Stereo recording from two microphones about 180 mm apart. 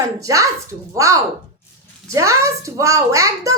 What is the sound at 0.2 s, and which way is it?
A woman's voice, 20° right (ahead or behind).